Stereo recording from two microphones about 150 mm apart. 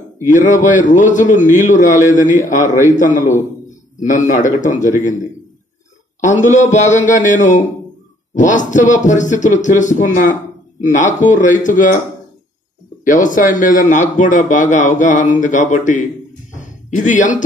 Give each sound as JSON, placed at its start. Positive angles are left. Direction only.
{"t": 0.3, "sound": "speech", "side_deg": 55}
{"t": 6.2, "sound": "speech", "side_deg": 55}
{"t": 13.0, "sound": "speech", "side_deg": 60}
{"t": 16.5, "sound": "a sound", "side_deg": 55}